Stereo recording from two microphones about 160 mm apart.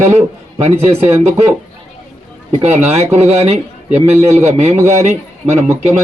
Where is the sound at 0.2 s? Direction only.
40° right (ahead or behind).